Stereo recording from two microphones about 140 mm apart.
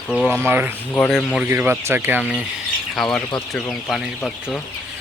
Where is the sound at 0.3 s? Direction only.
15° right (ahead or behind).